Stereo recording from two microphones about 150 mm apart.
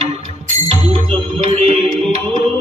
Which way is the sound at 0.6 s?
40° right (ahead or behind).